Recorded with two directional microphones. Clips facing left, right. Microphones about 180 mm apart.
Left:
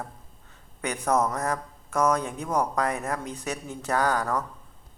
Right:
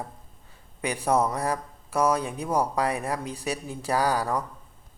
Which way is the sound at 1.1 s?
10° right (ahead or behind).